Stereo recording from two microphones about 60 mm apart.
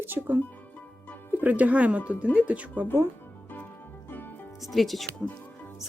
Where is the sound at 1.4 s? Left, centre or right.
Right.